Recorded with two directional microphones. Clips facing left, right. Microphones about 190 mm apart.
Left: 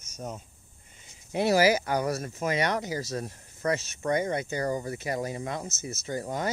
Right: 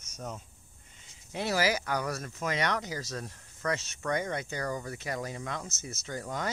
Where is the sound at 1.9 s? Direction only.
30° left (ahead or behind).